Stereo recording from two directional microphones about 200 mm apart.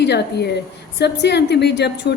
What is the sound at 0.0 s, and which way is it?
A woman's voice, 55° left (ahead or behind).